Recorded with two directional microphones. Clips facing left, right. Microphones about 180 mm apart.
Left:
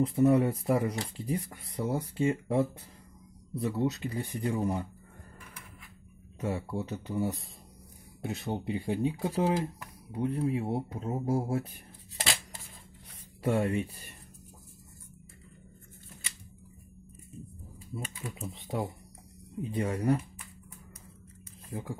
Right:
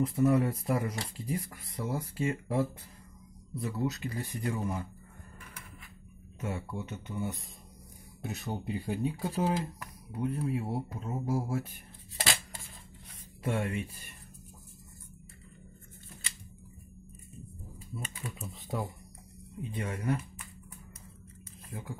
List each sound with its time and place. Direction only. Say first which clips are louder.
0.0 s speech: left 2 dB; 30° left (ahead or behind)
6.4 s speech: left 4 dB; 30° left (ahead or behind)
13.4 s speech: left 5 dB; 35° left (ahead or behind)
18.4 s speech: left 3 dB; 25° left (ahead or behind)
21.6 s speech: left 4 dB; 30° left (ahead or behind)